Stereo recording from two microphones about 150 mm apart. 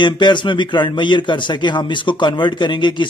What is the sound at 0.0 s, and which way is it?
A man's voice, 30° left (ahead or behind).